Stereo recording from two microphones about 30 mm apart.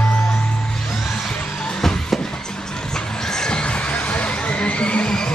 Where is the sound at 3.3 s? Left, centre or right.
Left.